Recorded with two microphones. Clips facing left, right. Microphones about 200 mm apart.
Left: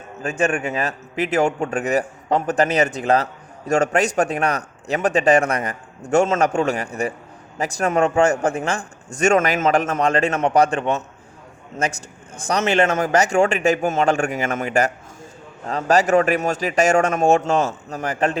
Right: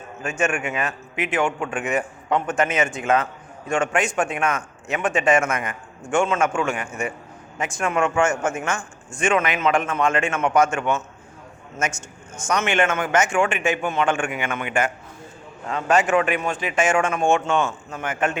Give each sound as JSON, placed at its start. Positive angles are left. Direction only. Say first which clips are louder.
{"t": 0.2, "sound": "a man's voice", "louder": "left 3 dB", "side_deg": 35}